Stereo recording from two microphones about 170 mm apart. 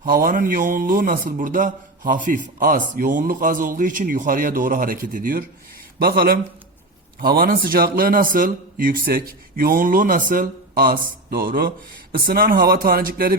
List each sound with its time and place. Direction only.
0.0 s a man's voice: 55° right (ahead or behind)